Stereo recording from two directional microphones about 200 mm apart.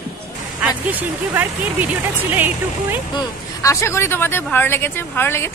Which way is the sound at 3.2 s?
15° left (ahead or behind).